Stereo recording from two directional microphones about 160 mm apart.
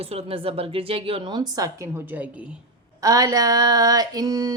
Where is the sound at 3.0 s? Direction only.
20° right (ahead or behind).